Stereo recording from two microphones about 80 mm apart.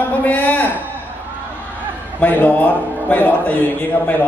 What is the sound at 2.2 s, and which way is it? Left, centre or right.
Music, left.